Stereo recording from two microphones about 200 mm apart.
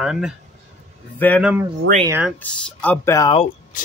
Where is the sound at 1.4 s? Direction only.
5° right (ahead or behind).